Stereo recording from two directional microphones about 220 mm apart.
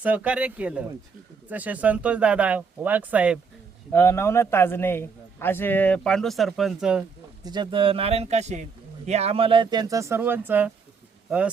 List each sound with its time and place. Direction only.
0.0 s speech: 5° right (ahead or behind)
3.9 s a man's voice: 10° left (ahead or behind)
7.4 s speech: 20° right (ahead or behind)